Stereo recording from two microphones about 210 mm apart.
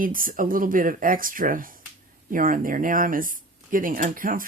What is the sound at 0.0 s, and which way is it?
Speech, 40° right (ahead or behind).